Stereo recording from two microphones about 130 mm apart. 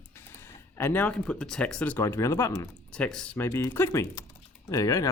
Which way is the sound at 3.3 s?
20° left (ahead or behind).